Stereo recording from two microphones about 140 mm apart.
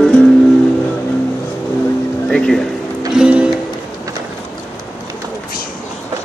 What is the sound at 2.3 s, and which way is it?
Music, 5° left (ahead or behind).